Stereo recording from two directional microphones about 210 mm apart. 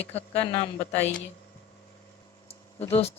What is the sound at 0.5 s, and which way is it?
Speech, 10° left (ahead or behind).